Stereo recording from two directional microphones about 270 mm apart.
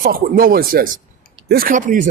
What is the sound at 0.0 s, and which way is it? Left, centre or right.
Speech, right.